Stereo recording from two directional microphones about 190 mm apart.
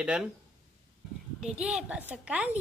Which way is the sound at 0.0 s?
5° right (ahead or behind).